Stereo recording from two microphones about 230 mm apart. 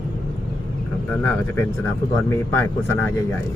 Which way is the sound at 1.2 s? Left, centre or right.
Centre.